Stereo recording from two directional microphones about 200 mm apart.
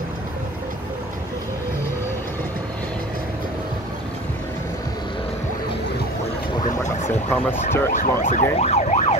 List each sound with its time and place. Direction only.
6.6 s a sound: 35° left (ahead or behind)
7.2 s speech: 10° left (ahead or behind)
7.9 s emergency vehicle: 40° left (ahead or behind)